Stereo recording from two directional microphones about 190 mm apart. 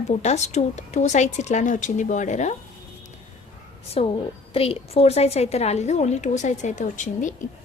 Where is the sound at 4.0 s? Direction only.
35° left (ahead or behind).